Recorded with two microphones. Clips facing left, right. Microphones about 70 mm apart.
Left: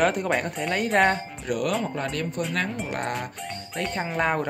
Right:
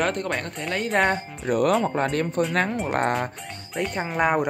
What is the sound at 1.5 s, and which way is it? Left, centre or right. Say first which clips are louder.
Speech: right 5 dB; right.